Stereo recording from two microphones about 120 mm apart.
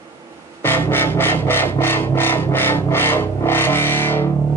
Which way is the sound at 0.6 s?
15° left (ahead or behind).